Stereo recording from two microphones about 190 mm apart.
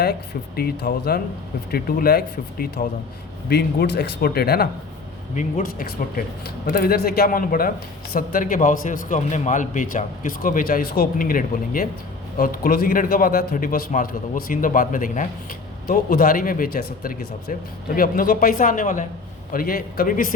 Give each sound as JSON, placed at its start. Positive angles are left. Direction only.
{"t": 0.0, "sound": "a man's voice", "side_deg": 55}